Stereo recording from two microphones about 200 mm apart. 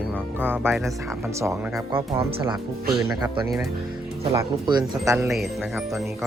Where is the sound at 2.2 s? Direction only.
25° right (ahead or behind).